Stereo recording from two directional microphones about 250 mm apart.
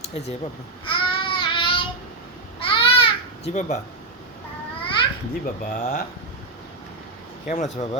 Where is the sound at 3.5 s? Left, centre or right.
Left.